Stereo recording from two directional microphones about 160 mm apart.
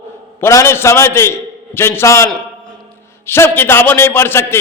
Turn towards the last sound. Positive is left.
turn(degrees=15)  # may be behind; listen again after turning